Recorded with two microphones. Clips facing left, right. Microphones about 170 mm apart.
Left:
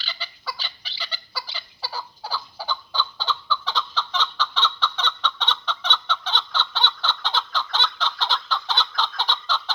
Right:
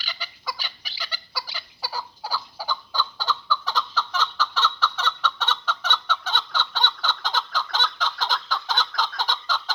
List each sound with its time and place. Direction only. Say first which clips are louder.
0.0 s fowl: even; 10° right (ahead or behind)